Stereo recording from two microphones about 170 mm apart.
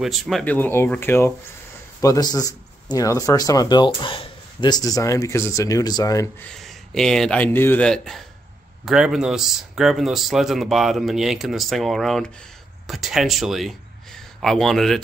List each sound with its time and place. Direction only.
0.0 s speech: centre (ahead or behind); by 6.3 s 20° left (ahead or behind)
6.5 s speech: centre (ahead or behind)